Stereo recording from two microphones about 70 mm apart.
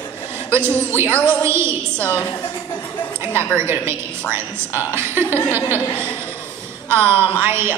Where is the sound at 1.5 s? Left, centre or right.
Right.